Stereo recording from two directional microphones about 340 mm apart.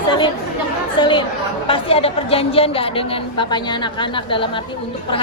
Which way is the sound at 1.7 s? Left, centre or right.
Centre.